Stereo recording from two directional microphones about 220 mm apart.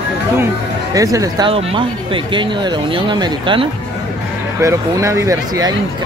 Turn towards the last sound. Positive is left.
turn(degrees=-15)  # may be behind; listen again after turning